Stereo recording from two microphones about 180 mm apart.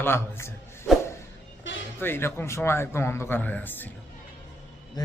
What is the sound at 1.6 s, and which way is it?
Music, 90° left.